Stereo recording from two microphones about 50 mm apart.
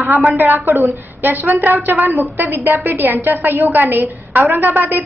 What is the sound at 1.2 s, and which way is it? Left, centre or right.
A woman's voice, right.